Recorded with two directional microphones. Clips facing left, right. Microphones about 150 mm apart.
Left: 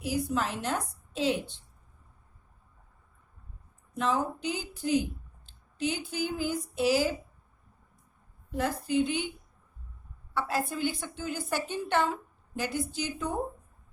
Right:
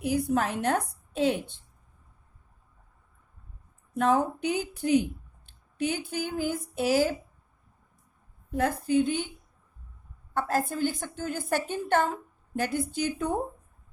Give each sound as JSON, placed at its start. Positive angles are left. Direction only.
{"t": 0.0, "sound": "a woman's voice", "side_deg": -55}
{"t": 3.9, "sound": "a woman's voice", "side_deg": -55}
{"t": 8.5, "sound": "a woman's voice", "side_deg": -50}
{"t": 10.3, "sound": "a woman's voice", "side_deg": -45}